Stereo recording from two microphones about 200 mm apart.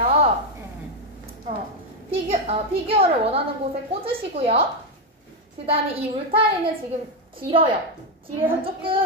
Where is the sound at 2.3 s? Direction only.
30° right (ahead or behind).